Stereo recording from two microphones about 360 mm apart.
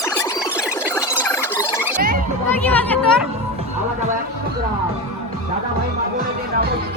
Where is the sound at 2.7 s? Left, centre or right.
Centre.